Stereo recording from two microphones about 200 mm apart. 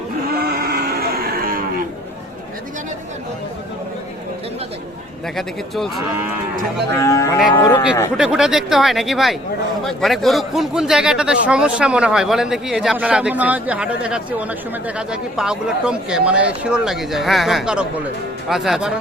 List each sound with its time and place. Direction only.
0.3 s cattle: 50° right (ahead or behind)
5.4 s a man's voice: centre (ahead or behind)
7.0 s cattle: 15° left (ahead or behind)
8.1 s a man's voice: 5° right (ahead or behind)